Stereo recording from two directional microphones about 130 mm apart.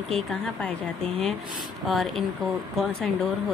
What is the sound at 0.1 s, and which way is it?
Speech, 5° left (ahead or behind).